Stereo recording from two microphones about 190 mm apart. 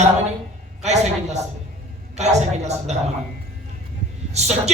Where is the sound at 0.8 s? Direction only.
35° right (ahead or behind).